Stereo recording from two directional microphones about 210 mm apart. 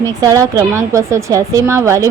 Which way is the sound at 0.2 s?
15° right (ahead or behind).